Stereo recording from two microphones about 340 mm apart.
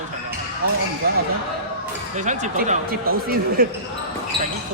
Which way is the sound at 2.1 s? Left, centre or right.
Right.